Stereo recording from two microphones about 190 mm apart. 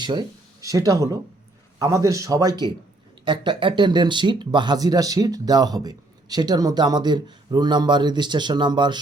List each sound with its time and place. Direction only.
0.0 s speech: 20° right (ahead or behind)